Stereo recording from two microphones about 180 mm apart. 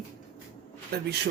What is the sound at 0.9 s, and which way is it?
Speech, 65° right (ahead or behind).